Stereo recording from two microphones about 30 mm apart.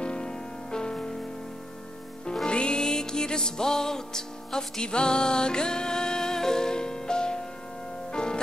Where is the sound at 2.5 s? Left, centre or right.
Left.